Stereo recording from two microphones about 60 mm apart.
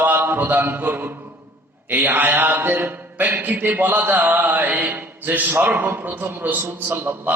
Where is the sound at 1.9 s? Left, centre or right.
Right.